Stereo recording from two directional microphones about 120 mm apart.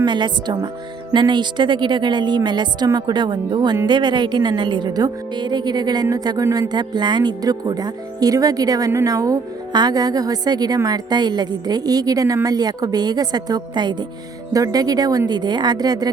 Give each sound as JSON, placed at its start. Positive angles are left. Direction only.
{"t": 0.0, "sound": "a woman's voice", "side_deg": -40}